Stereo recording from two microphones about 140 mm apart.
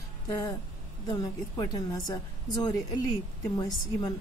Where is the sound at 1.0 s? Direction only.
30° left (ahead or behind).